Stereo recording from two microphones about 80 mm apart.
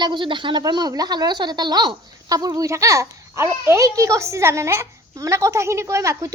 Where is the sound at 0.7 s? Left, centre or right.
Right.